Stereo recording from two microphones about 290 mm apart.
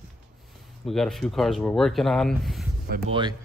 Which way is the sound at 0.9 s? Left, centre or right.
Centre.